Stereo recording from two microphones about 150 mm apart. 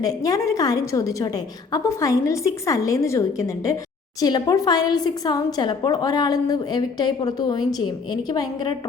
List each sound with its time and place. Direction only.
0.0 s a woman's voice: 25° left (ahead or behind)